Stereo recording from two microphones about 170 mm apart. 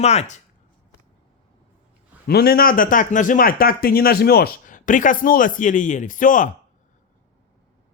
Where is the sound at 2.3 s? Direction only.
65° left (ahead or behind).